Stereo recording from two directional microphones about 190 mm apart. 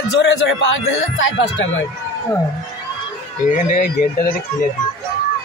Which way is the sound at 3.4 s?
45° left (ahead or behind).